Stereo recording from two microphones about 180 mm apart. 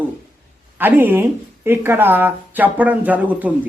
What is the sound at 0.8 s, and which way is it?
A man's voice, 10° right (ahead or behind).